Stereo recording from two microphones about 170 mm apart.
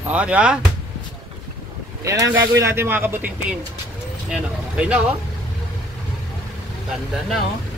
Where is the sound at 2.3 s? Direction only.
15° right (ahead or behind).